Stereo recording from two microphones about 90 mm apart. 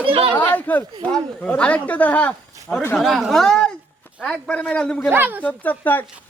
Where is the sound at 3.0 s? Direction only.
Centre (ahead or behind).